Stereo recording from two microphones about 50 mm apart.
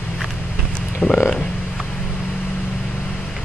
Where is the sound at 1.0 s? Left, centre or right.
Left.